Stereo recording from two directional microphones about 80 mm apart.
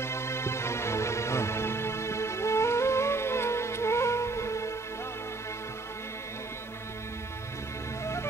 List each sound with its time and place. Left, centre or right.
0.0 s music: left
8.0 s music: left